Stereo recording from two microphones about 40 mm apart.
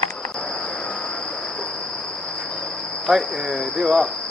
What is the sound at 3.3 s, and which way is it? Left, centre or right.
Speech, centre.